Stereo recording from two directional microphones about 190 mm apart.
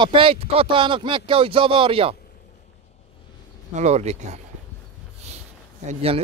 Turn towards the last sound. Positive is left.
turn(degrees=-30)  # may be behind; listen again after turning